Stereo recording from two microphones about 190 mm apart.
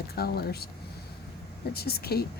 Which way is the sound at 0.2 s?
55° left (ahead or behind).